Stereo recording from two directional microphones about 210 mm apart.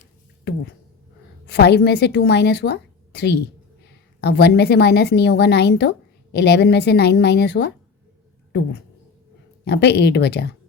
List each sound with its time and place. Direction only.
1.5 s a woman's voice: 50° left (ahead or behind)
9.6 s a woman's voice: 50° left (ahead or behind)